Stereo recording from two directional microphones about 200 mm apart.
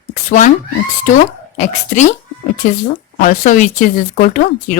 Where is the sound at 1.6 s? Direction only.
35° left (ahead or behind).